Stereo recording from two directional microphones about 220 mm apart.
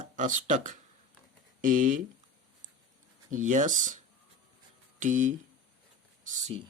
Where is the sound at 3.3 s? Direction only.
35° right (ahead or behind).